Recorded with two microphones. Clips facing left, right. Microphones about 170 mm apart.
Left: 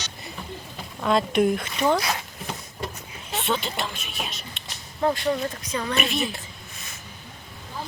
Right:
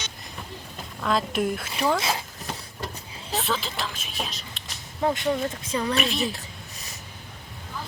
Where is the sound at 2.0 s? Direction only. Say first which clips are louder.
Even; 25° right (ahead or behind).